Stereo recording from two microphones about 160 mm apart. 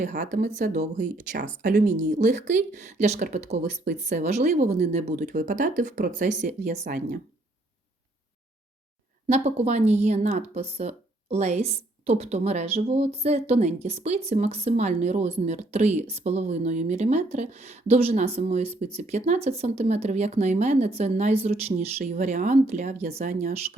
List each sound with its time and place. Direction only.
0.0 s a woman's voice: 50° right (ahead or behind)
5.2 s a woman's voice: 55° right (ahead or behind)
9.2 s a woman's voice: 40° right (ahead or behind)